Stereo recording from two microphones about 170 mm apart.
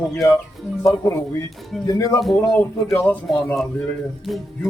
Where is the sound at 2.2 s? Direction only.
Centre (ahead or behind).